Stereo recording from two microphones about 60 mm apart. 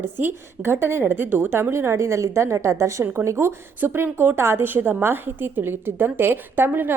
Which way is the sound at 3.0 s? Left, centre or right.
Right.